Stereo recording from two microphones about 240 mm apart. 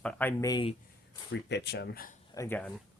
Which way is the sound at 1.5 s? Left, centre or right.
Left.